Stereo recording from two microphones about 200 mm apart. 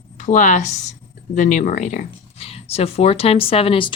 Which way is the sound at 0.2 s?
40° left (ahead or behind).